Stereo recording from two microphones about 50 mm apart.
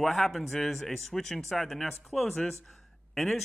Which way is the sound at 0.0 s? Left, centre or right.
Centre.